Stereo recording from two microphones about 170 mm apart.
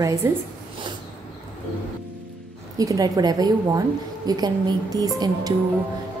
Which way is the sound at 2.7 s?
20° right (ahead or behind).